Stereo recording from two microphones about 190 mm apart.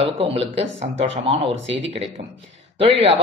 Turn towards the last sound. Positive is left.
turn(degrees=-30)  # may be behind; listen again after turning